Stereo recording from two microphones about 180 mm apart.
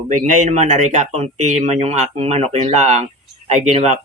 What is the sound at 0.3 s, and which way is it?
Speech, 40° right (ahead or behind).